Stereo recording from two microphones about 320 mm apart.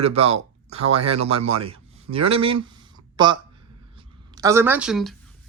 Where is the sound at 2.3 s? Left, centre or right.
Centre.